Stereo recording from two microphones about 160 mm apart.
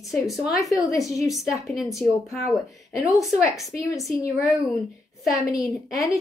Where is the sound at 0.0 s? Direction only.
Centre (ahead or behind).